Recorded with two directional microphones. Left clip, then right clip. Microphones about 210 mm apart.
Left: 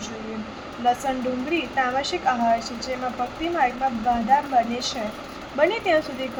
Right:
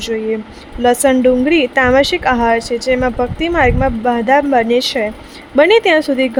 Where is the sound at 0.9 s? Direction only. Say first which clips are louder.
Right 12 dB; 60° right (ahead or behind).